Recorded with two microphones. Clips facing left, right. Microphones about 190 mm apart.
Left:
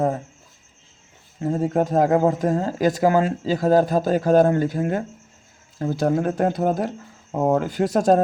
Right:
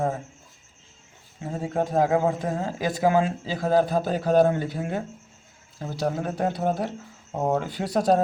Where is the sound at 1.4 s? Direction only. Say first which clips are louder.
Left 6 dB; 45° left (ahead or behind).